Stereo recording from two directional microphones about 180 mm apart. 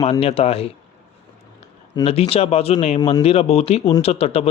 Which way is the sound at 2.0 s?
35° left (ahead or behind).